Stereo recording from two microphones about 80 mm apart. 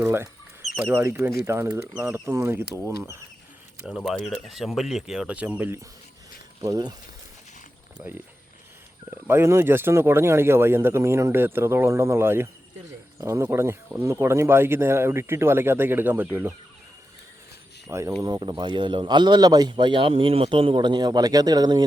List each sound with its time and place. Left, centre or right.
0.0 s speech: right
3.8 s speech: centre
6.6 s speech: right
9.0 s speech: right
17.8 s speech: right
18.2 s speech: right